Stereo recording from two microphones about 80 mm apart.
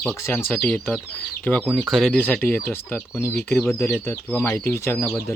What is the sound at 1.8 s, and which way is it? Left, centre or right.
Speech, centre.